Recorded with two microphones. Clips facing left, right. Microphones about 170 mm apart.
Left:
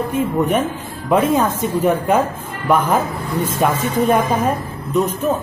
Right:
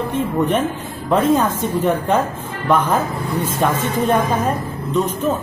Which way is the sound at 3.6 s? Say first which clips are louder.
Left 1 dB; 5° left (ahead or behind).